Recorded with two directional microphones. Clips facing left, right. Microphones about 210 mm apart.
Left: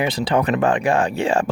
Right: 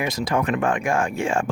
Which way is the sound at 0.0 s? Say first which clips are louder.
Left 4 dB; 30° left (ahead or behind).